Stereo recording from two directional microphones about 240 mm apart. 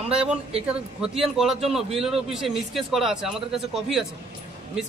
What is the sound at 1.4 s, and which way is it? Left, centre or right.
A man's voice, centre.